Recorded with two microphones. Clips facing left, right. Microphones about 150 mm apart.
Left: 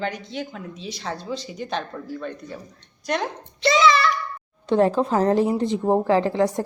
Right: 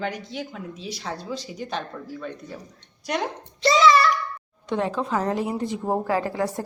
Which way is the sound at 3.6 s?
35° right (ahead or behind).